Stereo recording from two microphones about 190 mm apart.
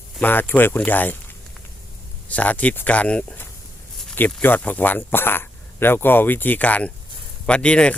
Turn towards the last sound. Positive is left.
turn(degrees=5)  # may be behind; listen again after turning